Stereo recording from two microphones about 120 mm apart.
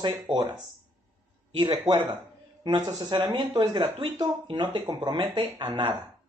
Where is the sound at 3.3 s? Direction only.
40° right (ahead or behind).